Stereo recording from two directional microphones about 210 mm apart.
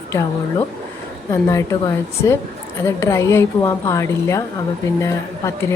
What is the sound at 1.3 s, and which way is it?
A woman's voice, 15° left (ahead or behind).